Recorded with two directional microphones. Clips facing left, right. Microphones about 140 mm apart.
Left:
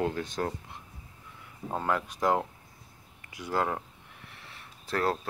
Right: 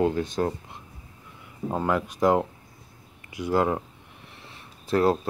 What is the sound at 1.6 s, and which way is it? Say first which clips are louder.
Speech: right 5 dB; 15° right (ahead or behind).